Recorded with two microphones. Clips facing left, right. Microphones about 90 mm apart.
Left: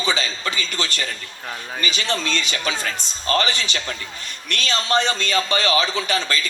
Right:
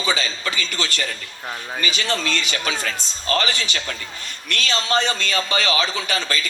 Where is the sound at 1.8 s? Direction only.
20° left (ahead or behind).